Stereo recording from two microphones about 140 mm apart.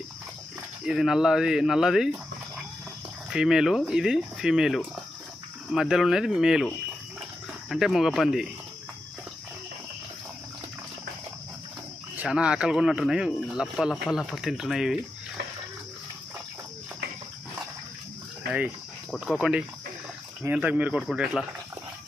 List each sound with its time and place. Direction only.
0.9 s speech: centre (ahead or behind)
3.2 s speech: 5° right (ahead or behind)
7.7 s speech: centre (ahead or behind)
12.1 s speech: 10° right (ahead or behind)
19.1 s speech: centre (ahead or behind)